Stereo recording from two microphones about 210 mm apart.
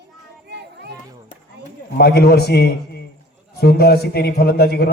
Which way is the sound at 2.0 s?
50° left (ahead or behind).